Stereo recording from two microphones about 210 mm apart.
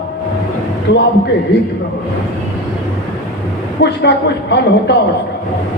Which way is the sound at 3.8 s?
55° left (ahead or behind).